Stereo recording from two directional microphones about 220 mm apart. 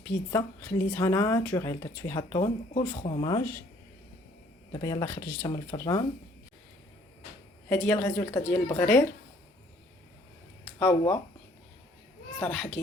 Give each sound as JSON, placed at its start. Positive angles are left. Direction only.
{"t": 0.0, "sound": "a woman's voice", "side_deg": 10}
{"t": 3.0, "sound": "speech", "side_deg": 25}
{"t": 4.7, "sound": "a woman's voice", "side_deg": 15}
{"t": 7.7, "sound": "a woman's voice", "side_deg": 5}
{"t": 10.8, "sound": "speech", "side_deg": 15}
{"t": 12.4, "sound": "a child's voice", "side_deg": 5}